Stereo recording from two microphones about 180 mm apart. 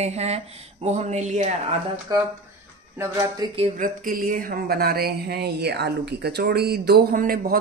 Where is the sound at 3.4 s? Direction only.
20° right (ahead or behind).